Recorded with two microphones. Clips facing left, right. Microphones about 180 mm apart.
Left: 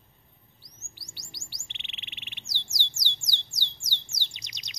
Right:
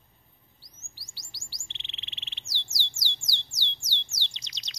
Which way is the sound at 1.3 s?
20° left (ahead or behind).